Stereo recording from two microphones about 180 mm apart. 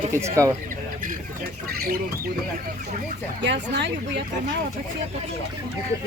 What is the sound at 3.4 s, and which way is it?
Speech, 75° right (ahead or behind).